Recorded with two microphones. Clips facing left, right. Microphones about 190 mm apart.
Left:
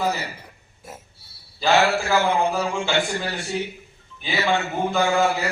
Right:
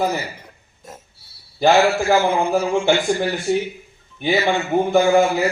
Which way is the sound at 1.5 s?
60° right (ahead or behind).